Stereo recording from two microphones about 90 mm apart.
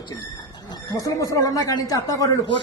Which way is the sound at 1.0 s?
40° left (ahead or behind).